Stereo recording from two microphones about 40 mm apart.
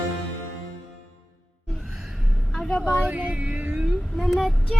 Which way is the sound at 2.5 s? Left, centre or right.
Centre.